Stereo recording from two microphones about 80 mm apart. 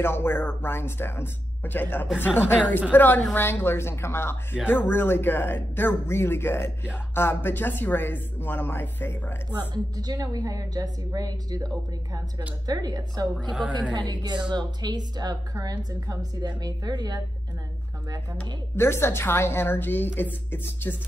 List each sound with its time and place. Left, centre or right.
0.0 s speech: left
9.6 s a woman's voice: right
13.9 s a woman's voice: right
18.8 s speech: left